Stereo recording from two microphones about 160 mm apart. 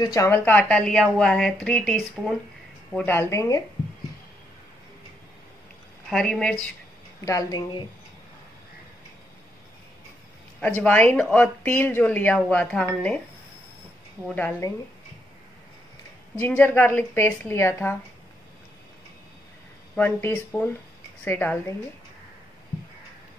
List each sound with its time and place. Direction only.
0.0 s a woman's voice: 20° left (ahead or behind)
6.0 s a woman's voice: 5° left (ahead or behind)
7.2 s a woman's voice: 25° left (ahead or behind)
10.8 s a woman's voice: 10° left (ahead or behind)
14.3 s a woman's voice: 10° left (ahead or behind)
16.3 s a woman's voice: 10° left (ahead or behind)
20.0 s a woman's voice: 15° left (ahead or behind)